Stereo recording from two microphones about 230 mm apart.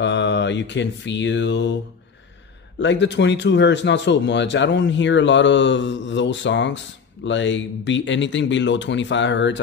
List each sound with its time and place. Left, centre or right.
0.0 s speech: left
2.8 s speech: left